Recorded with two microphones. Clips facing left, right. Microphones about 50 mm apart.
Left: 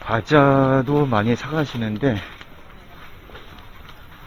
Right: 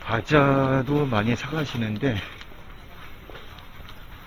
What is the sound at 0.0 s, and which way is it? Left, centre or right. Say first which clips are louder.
Speech: left 4 dB; centre.